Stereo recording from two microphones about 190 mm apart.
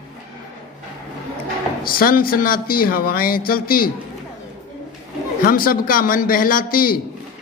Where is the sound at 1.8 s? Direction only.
50° left (ahead or behind).